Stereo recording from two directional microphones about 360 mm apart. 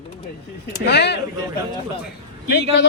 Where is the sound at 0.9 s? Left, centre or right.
Left.